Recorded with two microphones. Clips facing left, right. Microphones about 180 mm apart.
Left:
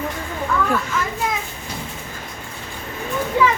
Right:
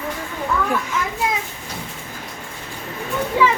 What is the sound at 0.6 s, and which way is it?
Speech, 10° right (ahead or behind).